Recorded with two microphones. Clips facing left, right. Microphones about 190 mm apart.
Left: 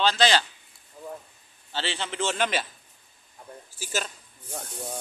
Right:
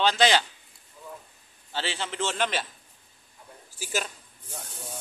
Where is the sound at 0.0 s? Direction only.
15° right (ahead or behind).